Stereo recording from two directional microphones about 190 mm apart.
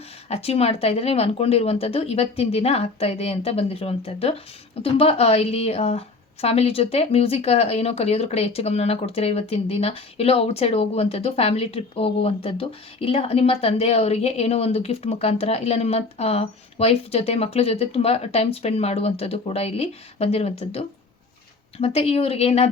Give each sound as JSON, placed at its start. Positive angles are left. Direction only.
{"t": 0.3, "sound": "speech", "side_deg": 30}